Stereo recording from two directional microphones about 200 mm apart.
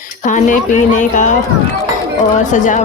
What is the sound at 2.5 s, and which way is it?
Speech, 40° left (ahead or behind).